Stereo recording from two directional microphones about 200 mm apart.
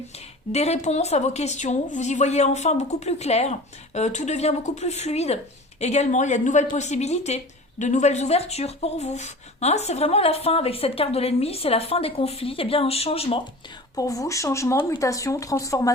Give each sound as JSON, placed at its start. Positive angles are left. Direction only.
{"t": 0.5, "sound": "a woman's voice", "side_deg": 30}
{"t": 13.9, "sound": "speech", "side_deg": 15}